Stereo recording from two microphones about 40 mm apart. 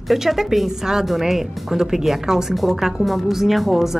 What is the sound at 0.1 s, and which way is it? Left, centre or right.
Speech, centre.